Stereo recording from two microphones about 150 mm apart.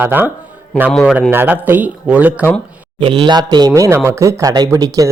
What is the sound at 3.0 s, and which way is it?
Speech, 35° right (ahead or behind).